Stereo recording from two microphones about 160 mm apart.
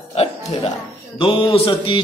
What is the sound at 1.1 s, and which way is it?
Mantra, 30° left (ahead or behind).